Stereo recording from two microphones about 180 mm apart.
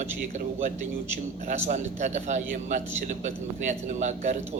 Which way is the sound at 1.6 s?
40° right (ahead or behind).